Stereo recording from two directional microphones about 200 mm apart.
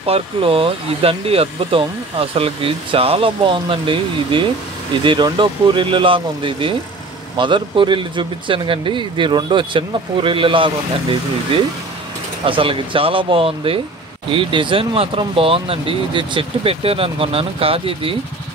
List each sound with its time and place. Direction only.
0.0 s speech: 30° right (ahead or behind)